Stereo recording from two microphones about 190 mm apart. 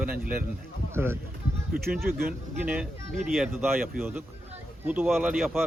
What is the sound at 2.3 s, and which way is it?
Speech, 5° right (ahead or behind).